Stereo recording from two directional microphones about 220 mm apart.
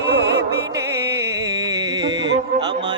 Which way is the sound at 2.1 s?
55° right (ahead or behind).